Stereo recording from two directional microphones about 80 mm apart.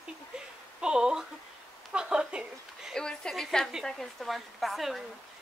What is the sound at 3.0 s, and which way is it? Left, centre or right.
A woman's voice, centre.